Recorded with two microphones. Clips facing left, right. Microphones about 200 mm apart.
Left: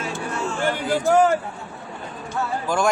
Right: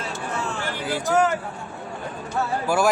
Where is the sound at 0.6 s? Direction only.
50° left (ahead or behind).